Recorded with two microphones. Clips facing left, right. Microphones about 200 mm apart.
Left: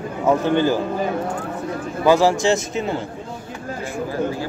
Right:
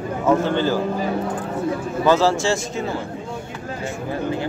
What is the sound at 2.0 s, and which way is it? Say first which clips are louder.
Speech: left 2 dB; 15° left (ahead or behind).